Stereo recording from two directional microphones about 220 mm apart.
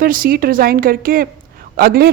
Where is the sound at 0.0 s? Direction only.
40° right (ahead or behind).